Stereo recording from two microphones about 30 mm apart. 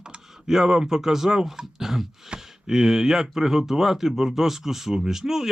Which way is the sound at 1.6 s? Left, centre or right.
Centre.